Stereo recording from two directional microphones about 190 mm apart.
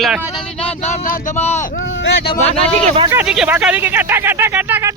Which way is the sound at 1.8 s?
85° left.